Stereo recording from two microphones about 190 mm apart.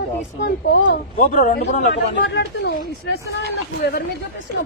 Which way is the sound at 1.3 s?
45° left (ahead or behind).